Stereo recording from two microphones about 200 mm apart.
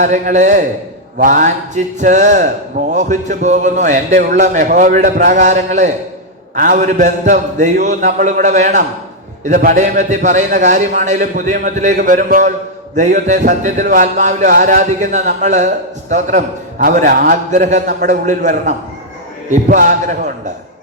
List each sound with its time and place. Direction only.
0.0 s speech: 35° right (ahead or behind)